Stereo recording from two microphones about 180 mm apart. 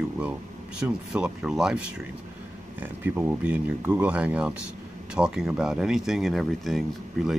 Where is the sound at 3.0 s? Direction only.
10° right (ahead or behind).